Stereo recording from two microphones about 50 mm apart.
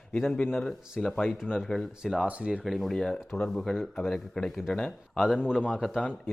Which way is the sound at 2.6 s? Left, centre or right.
Centre.